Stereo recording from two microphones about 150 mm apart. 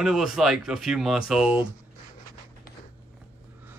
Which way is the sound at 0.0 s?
Centre (ahead or behind).